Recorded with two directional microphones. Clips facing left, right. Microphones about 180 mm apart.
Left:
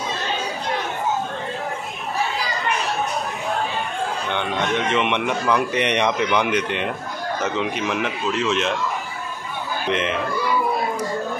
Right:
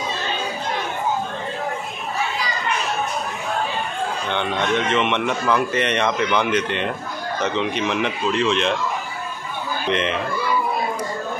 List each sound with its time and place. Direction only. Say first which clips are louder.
4.3 s speech: right 2 dB; 10° left (ahead or behind)
9.8 s speech: right 1 dB; 5° left (ahead or behind)